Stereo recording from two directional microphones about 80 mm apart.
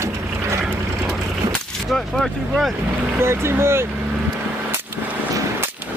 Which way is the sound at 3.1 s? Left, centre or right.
Right.